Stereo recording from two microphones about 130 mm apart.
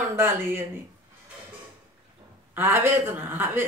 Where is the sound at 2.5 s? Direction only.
15° right (ahead or behind).